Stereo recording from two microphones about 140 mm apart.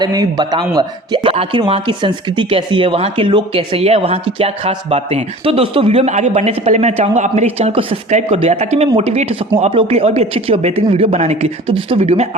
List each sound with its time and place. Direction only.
0.0 s speech: 30° right (ahead or behind); by 7.4 s 55° right (ahead or behind)
7.6 s speech: 40° right (ahead or behind)
8.1 s speech: 50° right (ahead or behind)